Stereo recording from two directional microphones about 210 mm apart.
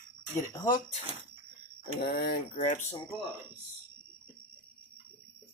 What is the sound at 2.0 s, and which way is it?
Speech, 50° left (ahead or behind).